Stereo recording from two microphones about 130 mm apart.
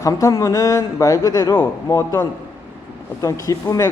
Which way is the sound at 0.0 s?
25° left (ahead or behind).